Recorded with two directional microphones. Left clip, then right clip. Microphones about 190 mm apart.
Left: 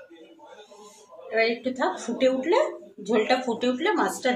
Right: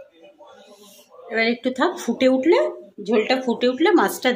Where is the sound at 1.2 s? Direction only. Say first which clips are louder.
Right 3 dB; 55° right (ahead or behind).